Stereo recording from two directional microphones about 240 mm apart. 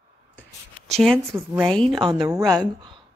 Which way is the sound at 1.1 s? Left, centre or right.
Centre.